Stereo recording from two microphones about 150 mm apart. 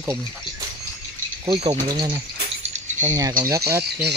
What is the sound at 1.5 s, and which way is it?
Speech, 35° right (ahead or behind).